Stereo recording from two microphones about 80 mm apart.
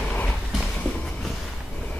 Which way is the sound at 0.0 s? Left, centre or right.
Left.